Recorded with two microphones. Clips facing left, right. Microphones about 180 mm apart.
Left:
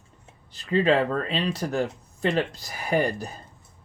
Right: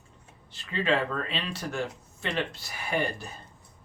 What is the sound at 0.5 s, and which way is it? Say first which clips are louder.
Speech: left 6 dB; 40° left (ahead or behind).